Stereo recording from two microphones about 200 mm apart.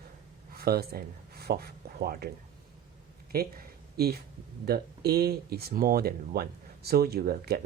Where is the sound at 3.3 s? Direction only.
50° right (ahead or behind).